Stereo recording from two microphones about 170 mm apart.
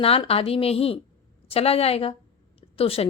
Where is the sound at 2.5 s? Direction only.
35° left (ahead or behind).